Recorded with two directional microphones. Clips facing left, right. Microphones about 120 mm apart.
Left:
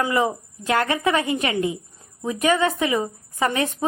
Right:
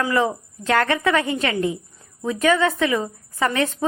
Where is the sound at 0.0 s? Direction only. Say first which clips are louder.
Right 1 dB; 15° left (ahead or behind).